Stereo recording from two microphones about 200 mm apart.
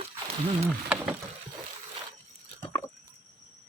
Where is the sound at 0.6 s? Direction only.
5° right (ahead or behind).